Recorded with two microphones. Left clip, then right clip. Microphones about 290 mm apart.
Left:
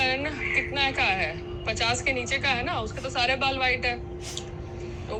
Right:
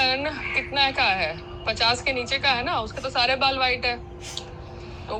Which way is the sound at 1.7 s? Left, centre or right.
Centre.